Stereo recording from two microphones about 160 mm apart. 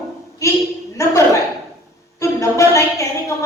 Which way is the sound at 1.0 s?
20° left (ahead or behind).